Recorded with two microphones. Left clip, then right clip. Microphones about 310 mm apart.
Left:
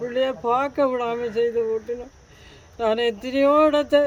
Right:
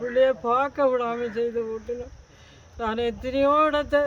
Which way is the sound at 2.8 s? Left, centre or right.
Centre.